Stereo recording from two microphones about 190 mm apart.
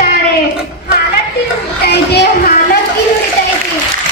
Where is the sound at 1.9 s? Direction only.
60° left (ahead or behind).